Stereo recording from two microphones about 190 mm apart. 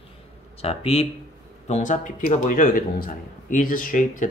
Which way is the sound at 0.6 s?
30° left (ahead or behind).